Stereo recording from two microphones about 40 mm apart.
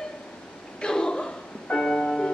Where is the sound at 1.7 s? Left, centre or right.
Left.